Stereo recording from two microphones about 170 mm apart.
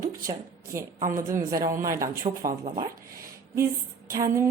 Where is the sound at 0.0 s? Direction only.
15° right (ahead or behind).